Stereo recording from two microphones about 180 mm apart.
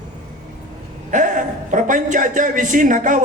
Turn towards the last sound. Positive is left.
turn(degrees=-45)  # may be behind; listen again after turning